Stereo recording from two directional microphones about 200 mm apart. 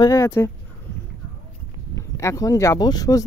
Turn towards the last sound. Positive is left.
turn(degrees=20)  # may be behind; listen again after turning